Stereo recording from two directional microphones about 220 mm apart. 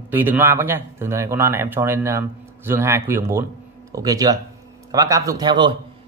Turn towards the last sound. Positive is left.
turn(degrees=-20)  # may be behind; listen again after turning